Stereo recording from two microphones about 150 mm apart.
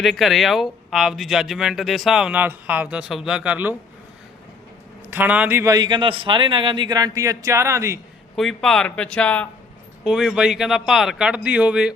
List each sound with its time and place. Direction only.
0.0 s speech: centre (ahead or behind)
5.1 s a man's voice: 10° right (ahead or behind)
8.4 s speech: centre (ahead or behind)
10.0 s speech: 5° right (ahead or behind)